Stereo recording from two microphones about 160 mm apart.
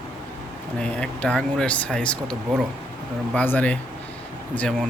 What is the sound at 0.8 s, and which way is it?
Speech, 5° left (ahead or behind).